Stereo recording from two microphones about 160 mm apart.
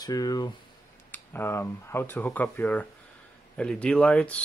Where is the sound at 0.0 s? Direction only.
25° left (ahead or behind).